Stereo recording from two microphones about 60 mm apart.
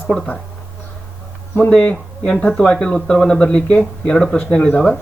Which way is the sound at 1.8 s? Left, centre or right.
Left.